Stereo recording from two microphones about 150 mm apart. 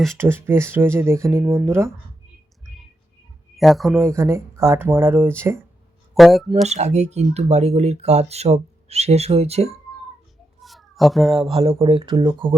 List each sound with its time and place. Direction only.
0.2 s speech: 15° right (ahead or behind)
3.6 s speech: centre (ahead or behind)
3.9 s speech: 15° right (ahead or behind)
6.1 s speech: centre (ahead or behind)
6.5 s speech: 50° right (ahead or behind)
10.6 s cat: centre (ahead or behind)
11.4 s speech: 35° right (ahead or behind)